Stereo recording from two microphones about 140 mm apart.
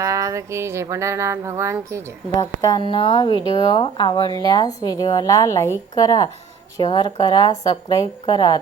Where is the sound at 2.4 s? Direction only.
30° left (ahead or behind).